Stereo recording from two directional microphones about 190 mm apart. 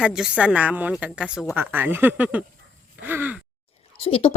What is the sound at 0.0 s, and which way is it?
A woman's voice, 5° right (ahead or behind).